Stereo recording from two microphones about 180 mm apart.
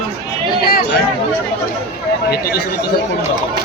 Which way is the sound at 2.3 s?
65° left (ahead or behind).